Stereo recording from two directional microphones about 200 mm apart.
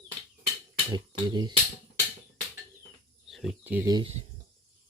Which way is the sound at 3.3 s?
Centre (ahead or behind).